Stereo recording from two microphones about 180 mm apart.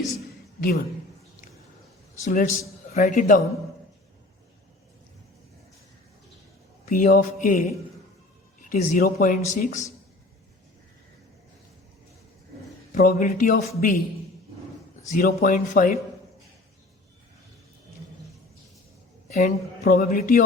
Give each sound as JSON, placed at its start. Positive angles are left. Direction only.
{"t": 2.2, "sound": "speech", "side_deg": 50}
{"t": 6.8, "sound": "speech", "side_deg": 45}
{"t": 8.7, "sound": "speech", "side_deg": 45}
{"t": 12.9, "sound": "speech", "side_deg": 50}
{"t": 15.1, "sound": "speech", "side_deg": 45}
{"t": 19.3, "sound": "speech", "side_deg": 55}